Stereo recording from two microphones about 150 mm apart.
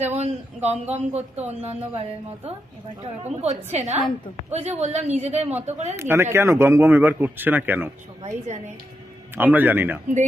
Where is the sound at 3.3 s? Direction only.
45° right (ahead or behind).